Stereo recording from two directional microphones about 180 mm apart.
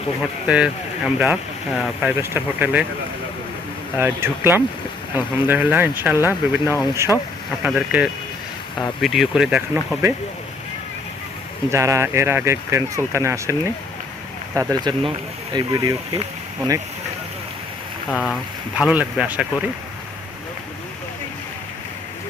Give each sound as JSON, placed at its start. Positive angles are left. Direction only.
{"t": 0.4, "sound": "speech", "side_deg": -5}
{"t": 3.9, "sound": "speech", "side_deg": -10}
{"t": 11.7, "sound": "speech", "side_deg": -15}
{"t": 18.1, "sound": "speech", "side_deg": 5}